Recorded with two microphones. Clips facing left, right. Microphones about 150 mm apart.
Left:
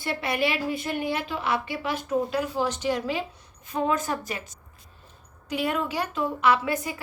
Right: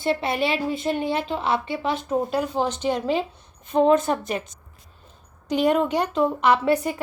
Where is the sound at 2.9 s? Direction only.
30° right (ahead or behind).